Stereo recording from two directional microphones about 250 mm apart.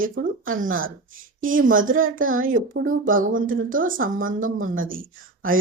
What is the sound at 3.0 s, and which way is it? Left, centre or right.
Speech, right.